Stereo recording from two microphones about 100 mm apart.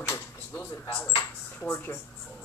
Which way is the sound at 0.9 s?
15° left (ahead or behind).